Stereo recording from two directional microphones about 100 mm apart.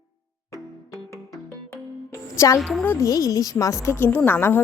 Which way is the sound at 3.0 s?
40° left (ahead or behind).